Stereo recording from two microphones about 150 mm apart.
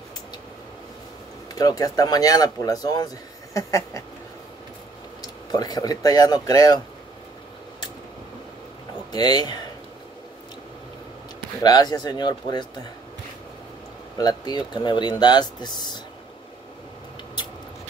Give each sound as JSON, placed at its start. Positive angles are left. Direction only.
{"t": 1.5, "sound": "speech", "side_deg": 25}
{"t": 5.2, "sound": "speech", "side_deg": 25}
{"t": 9.1, "sound": "speech", "side_deg": 25}
{"t": 11.6, "sound": "speech", "side_deg": 25}
{"t": 14.1, "sound": "speech", "side_deg": 25}